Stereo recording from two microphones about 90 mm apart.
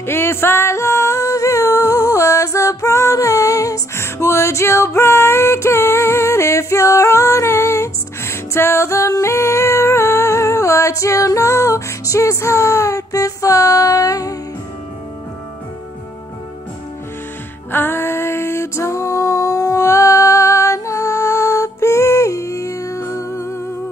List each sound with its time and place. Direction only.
0.0 s music: 25° left (ahead or behind)
17.6 s music: 25° left (ahead or behind)